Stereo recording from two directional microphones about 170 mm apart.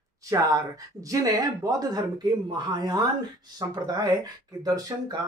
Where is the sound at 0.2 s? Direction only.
20° right (ahead or behind).